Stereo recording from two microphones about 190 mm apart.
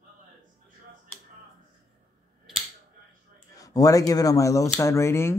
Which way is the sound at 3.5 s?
20° left (ahead or behind).